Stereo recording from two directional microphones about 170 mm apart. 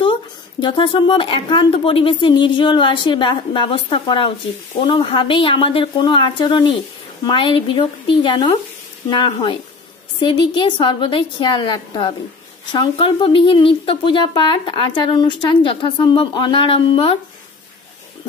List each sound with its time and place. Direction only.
0.6 s speech: 30° left (ahead or behind)